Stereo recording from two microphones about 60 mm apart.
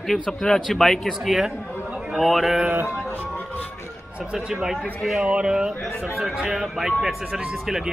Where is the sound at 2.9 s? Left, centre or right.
Left.